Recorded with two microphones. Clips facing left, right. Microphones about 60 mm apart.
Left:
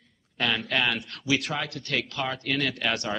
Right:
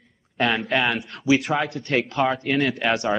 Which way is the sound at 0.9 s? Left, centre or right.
Centre.